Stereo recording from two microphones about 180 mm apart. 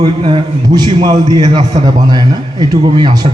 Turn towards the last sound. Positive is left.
turn(degrees=-25)  # may be behind; listen again after turning